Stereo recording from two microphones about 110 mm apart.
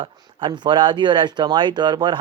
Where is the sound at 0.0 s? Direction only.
50° right (ahead or behind).